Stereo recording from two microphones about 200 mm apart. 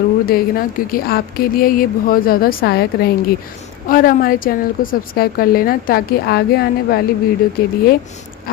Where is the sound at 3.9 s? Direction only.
45° left (ahead or behind).